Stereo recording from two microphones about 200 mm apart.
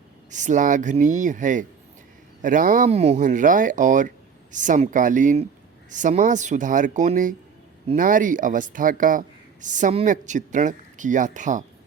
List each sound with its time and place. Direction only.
0.3 s speech: 40° right (ahead or behind)